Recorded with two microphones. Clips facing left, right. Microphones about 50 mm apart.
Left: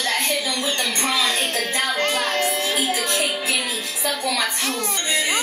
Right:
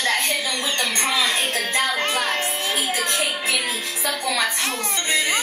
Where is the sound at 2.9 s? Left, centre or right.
Right.